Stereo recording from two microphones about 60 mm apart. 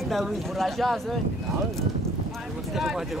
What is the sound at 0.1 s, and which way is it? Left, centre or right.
Speech, centre.